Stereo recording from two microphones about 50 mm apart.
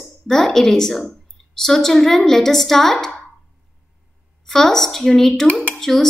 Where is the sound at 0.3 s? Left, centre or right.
Centre.